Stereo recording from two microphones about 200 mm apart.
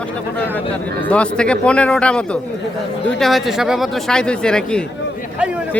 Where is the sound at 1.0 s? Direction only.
5° left (ahead or behind).